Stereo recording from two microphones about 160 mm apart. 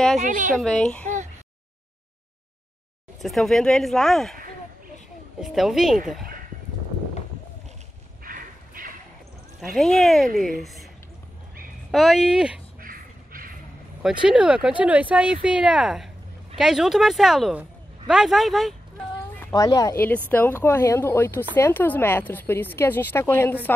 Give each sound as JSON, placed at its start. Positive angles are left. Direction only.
{"t": 0.2, "sound": "speech", "side_deg": -55}
{"t": 0.6, "sound": "speech", "side_deg": 5}
{"t": 1.0, "sound": "a sound", "side_deg": -50}
{"t": 3.2, "sound": "speech", "side_deg": 0}
{"t": 5.4, "sound": "speech", "side_deg": 0}
{"t": 8.2, "sound": "a sound", "side_deg": -60}
{"t": 9.8, "sound": "speech", "side_deg": 0}
{"t": 11.9, "sound": "speech", "side_deg": 0}
{"t": 12.8, "sound": "crow", "side_deg": -60}
{"t": 14.0, "sound": "speech", "side_deg": -5}
{"t": 19.5, "sound": "speech", "side_deg": 20}